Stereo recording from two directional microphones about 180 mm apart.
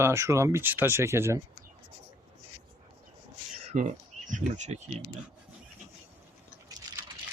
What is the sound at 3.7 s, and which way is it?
Speech, 45° right (ahead or behind).